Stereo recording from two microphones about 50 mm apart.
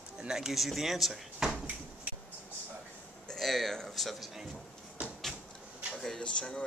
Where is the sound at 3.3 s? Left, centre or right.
Centre.